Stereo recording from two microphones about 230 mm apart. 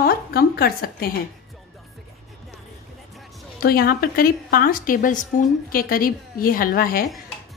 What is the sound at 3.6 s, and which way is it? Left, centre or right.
A woman's voice, left.